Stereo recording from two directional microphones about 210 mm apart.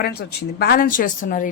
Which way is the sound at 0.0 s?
50° left (ahead or behind).